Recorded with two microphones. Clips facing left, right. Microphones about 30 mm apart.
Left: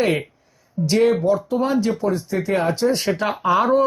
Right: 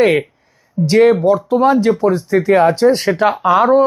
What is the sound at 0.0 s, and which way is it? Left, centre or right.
Speech, right.